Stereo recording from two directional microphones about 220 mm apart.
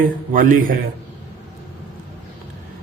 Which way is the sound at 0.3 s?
40° right (ahead or behind).